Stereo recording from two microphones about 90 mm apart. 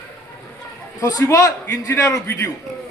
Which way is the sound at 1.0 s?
40° left (ahead or behind).